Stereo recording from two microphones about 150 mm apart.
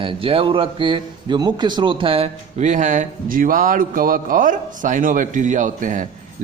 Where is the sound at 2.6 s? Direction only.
55° right (ahead or behind).